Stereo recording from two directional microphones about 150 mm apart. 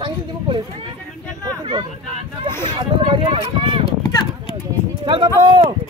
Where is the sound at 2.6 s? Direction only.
30° right (ahead or behind).